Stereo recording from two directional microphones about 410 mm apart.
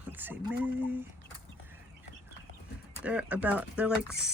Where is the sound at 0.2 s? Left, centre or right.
Centre.